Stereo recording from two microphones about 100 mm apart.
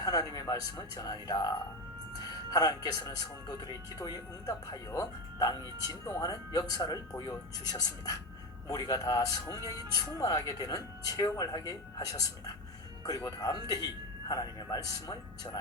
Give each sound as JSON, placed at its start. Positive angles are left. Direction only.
{"t": 0.0, "sound": "speech", "side_deg": 40}